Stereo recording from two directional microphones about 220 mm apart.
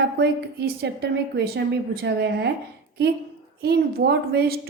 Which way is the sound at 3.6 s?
45° right (ahead or behind).